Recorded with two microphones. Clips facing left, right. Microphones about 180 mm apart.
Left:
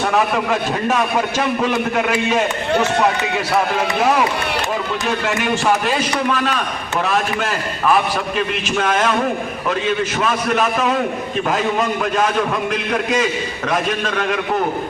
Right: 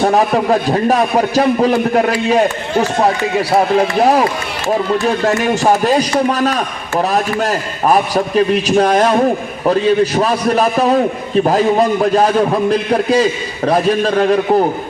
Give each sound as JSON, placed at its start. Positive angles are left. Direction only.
{"t": 0.0, "sound": "a man's voice", "side_deg": -35}